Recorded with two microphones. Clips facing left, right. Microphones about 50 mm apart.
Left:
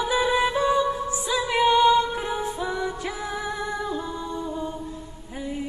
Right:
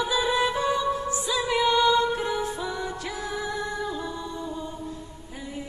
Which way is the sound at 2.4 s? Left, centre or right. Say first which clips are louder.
Left 3 dB; left.